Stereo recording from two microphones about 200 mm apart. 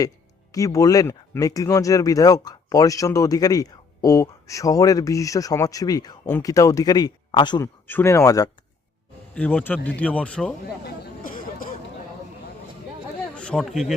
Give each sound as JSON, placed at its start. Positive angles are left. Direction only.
{"t": 0.5, "sound": "speech", "side_deg": 15}
{"t": 7.9, "sound": "speech", "side_deg": 10}
{"t": 9.3, "sound": "speech", "side_deg": 5}
{"t": 10.8, "sound": "a sound", "side_deg": 45}
{"t": 13.3, "sound": "speech", "side_deg": 5}